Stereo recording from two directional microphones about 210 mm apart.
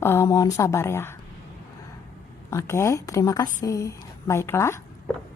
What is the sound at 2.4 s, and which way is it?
Mantra, 15° left (ahead or behind).